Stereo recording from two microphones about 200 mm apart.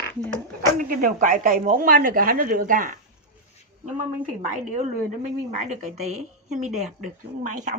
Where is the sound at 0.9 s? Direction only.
45° right (ahead or behind).